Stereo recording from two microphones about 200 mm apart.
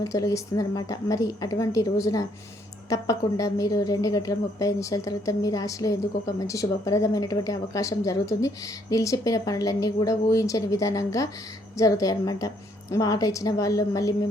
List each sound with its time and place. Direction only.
0.0 s a woman's voice: 15° left (ahead or behind)